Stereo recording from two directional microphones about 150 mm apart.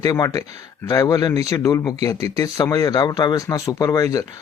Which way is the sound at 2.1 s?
40° right (ahead or behind).